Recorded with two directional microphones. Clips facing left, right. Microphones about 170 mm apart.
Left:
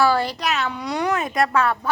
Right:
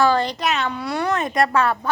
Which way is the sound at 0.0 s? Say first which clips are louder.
Right 1 dB; 10° left (ahead or behind).